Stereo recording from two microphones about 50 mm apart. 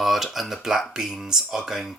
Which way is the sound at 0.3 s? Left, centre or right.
Centre.